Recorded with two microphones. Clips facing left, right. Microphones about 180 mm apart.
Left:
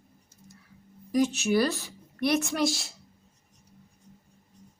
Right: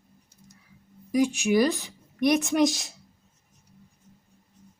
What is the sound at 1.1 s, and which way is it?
A woman's voice, 10° right (ahead or behind).